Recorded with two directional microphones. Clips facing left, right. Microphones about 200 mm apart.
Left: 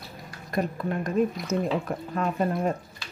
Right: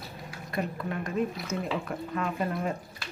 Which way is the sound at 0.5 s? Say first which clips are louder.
Left 4 dB; 40° left (ahead or behind).